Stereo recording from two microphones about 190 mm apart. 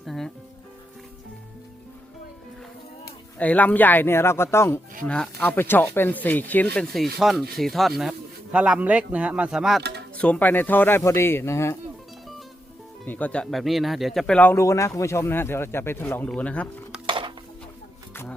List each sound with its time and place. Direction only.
0.0 s speech: centre (ahead or behind)
3.0 s speech: 10° left (ahead or behind)
13.1 s speech: 10° left (ahead or behind)
17.1 s dishes: 25° right (ahead or behind)
18.1 s music: 10° left (ahead or behind)